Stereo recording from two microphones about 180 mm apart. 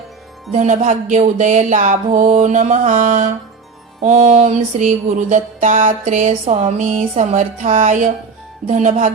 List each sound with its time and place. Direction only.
0.5 s music: 40° right (ahead or behind)
8.6 s speech: 40° right (ahead or behind)